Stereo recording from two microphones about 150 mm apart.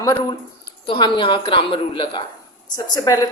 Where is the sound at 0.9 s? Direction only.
35° left (ahead or behind).